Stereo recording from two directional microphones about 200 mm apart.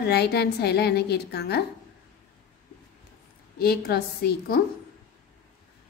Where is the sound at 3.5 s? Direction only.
50° left (ahead or behind).